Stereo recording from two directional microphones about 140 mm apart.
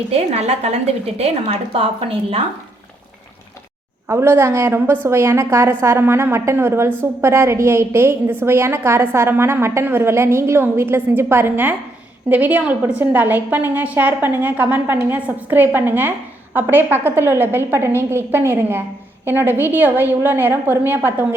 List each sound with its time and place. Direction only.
0.1 s a woman's voice: 50° right (ahead or behind)
4.1 s a woman's voice: 20° right (ahead or behind)